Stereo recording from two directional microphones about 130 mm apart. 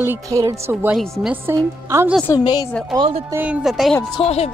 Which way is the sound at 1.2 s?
15° right (ahead or behind).